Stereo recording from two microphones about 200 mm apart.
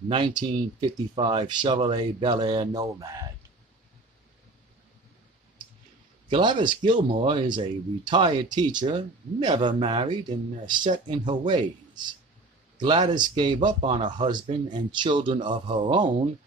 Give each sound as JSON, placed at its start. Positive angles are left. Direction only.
{"t": 0.1, "sound": "speech", "side_deg": -25}
{"t": 6.3, "sound": "speech", "side_deg": -25}
{"t": 12.7, "sound": "speech", "side_deg": -20}